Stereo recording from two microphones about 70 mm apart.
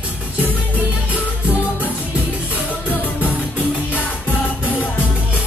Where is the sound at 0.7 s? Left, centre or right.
Right.